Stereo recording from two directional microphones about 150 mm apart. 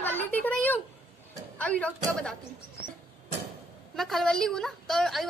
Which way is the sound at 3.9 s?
Centre (ahead or behind).